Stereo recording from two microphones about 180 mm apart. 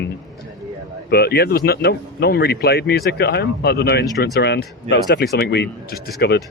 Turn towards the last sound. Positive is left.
turn(degrees=65)  # may be behind; listen again after turning